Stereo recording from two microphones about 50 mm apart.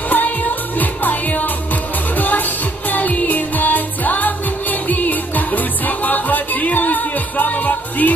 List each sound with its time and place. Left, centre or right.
0.1 s music: left